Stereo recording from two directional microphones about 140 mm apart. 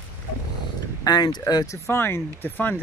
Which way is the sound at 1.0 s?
30° left (ahead or behind).